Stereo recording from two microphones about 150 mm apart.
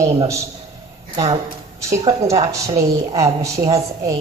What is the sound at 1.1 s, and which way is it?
Speech, 40° right (ahead or behind).